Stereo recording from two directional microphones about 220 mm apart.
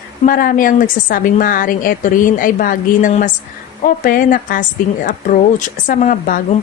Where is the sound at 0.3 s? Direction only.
40° left (ahead or behind).